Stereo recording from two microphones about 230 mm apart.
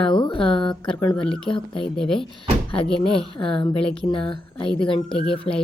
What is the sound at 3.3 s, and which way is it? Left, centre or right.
A woman's voice, left.